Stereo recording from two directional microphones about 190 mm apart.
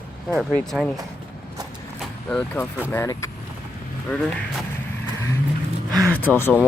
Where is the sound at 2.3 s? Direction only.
5° left (ahead or behind).